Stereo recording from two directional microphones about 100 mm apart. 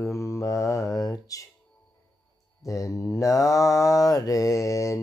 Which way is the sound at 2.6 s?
35° left (ahead or behind).